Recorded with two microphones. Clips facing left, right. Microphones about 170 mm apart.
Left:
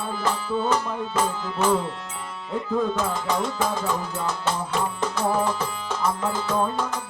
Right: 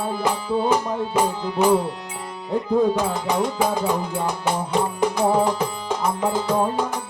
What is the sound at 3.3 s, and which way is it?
Music, 15° right (ahead or behind).